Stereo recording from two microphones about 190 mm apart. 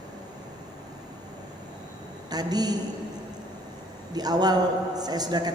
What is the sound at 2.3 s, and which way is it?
Speech, 20° right (ahead or behind).